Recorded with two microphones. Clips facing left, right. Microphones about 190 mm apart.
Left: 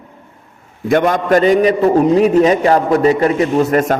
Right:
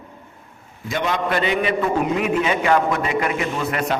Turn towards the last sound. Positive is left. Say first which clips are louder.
# left 9 dB
turn(degrees=45)  # may be behind; listen again after turning